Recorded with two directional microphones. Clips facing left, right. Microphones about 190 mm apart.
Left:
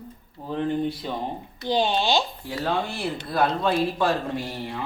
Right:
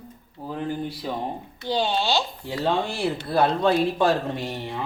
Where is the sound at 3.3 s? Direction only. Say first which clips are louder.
Right 2 dB; 25° right (ahead or behind).